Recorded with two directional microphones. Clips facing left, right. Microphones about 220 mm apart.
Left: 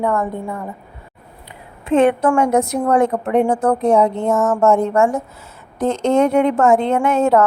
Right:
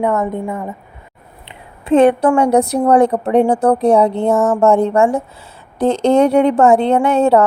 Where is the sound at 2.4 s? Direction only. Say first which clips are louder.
Right 3 dB; 35° right (ahead or behind).